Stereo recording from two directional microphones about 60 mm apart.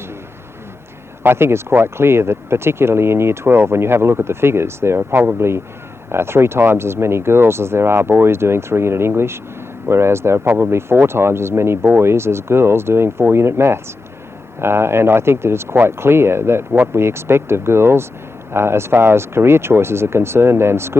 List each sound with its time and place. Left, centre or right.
1.2 s speech: right
6.1 s speech: right
10.4 s speech: right
10.7 s speech: right